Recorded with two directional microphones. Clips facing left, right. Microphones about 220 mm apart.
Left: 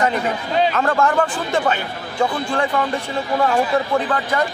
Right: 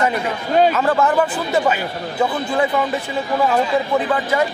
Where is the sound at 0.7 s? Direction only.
5° right (ahead or behind).